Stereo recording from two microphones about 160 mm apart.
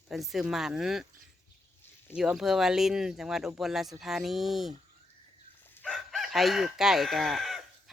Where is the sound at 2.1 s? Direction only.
5° right (ahead or behind).